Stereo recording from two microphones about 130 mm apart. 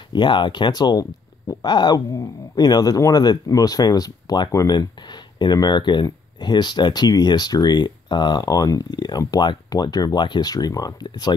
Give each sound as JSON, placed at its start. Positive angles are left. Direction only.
{"t": 0.1, "sound": "speech", "side_deg": 35}